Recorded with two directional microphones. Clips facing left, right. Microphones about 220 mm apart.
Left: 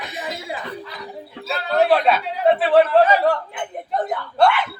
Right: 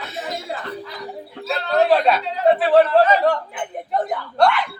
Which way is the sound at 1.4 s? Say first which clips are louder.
Even; centre (ahead or behind).